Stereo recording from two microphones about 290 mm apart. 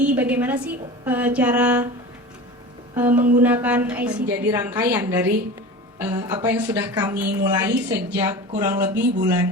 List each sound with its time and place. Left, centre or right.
0.0 s a woman's voice: centre
2.9 s a sound: centre
3.4 s a woman's voice: centre